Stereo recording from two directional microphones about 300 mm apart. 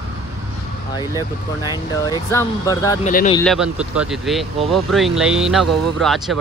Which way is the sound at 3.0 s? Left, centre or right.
Left.